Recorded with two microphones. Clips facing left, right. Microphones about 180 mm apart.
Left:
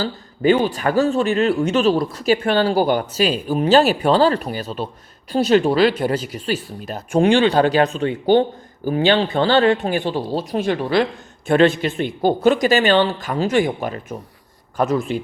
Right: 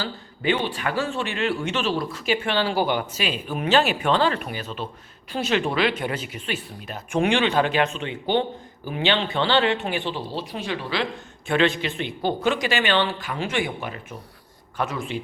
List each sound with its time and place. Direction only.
0.0 s speech: 40° left (ahead or behind)